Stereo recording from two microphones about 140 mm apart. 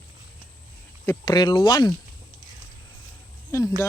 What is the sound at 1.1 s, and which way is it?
Speech, 30° left (ahead or behind).